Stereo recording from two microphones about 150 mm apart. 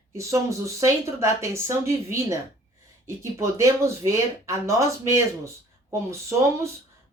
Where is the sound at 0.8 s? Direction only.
20° right (ahead or behind).